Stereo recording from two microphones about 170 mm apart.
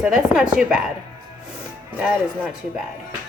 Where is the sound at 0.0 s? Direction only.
5° right (ahead or behind).